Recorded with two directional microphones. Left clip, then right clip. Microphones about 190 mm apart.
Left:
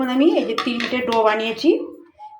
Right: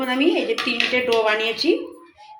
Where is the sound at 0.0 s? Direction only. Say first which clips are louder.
Left 2 dB; 65° left (ahead or behind).